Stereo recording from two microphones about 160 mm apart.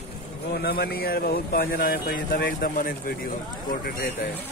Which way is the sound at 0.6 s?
75° left (ahead or behind).